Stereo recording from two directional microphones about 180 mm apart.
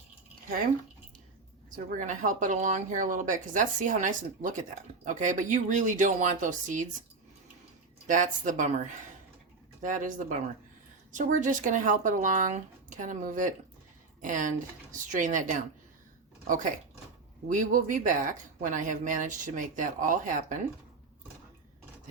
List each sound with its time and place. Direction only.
1.7 s speech: 45° right (ahead or behind)
8.0 s speech: 45° right (ahead or behind)
9.8 s speech: 45° right (ahead or behind)
17.5 s speech: 45° right (ahead or behind)